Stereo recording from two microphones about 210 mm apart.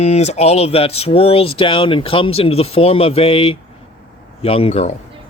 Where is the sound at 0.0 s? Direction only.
30° left (ahead or behind).